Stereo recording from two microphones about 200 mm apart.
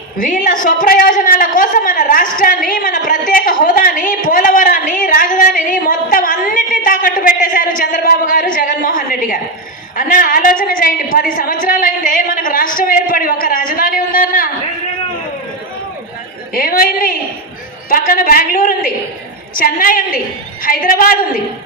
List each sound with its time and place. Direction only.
0.2 s a woman's voice: 40° left (ahead or behind)
16.6 s a woman's voice: 45° left (ahead or behind)